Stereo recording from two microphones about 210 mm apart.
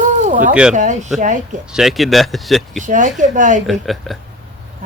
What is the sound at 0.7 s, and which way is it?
Speech, 35° right (ahead or behind).